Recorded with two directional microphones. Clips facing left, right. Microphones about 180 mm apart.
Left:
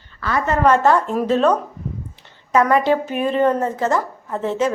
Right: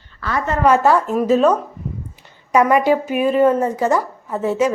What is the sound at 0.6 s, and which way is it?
A woman's voice, 10° right (ahead or behind).